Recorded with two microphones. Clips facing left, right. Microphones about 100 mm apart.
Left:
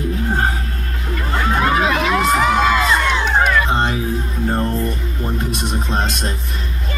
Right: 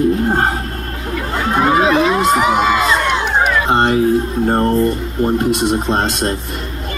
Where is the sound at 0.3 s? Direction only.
55° right (ahead or behind).